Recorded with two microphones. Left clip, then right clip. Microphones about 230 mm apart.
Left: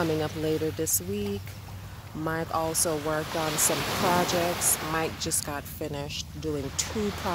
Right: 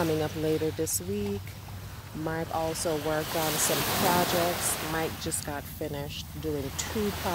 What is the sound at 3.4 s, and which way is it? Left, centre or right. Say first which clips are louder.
Speech: even; right.